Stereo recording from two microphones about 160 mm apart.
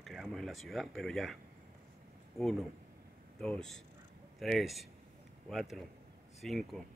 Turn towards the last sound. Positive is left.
turn(degrees=0)  # may be behind; listen again after turning